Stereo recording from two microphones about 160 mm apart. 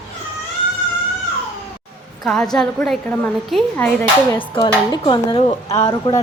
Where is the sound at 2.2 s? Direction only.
5° left (ahead or behind).